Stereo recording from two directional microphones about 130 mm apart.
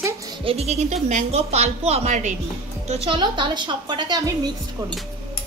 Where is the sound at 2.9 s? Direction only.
40° right (ahead or behind).